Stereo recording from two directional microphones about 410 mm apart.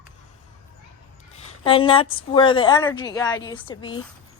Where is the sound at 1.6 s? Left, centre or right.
Centre.